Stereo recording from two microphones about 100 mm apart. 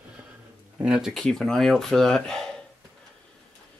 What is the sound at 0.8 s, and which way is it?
Speech, 5° right (ahead or behind).